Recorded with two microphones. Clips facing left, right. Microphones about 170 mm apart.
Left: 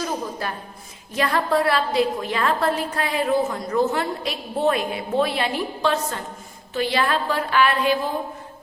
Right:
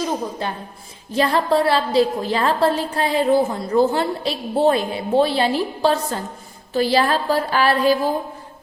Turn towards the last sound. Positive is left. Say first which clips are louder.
# right 3 dB
turn(degrees=-35)  # may be behind; listen again after turning